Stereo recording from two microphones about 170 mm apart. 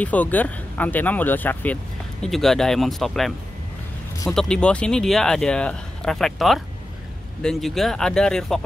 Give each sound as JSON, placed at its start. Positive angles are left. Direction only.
{"t": 0.0, "sound": "speech", "side_deg": 10}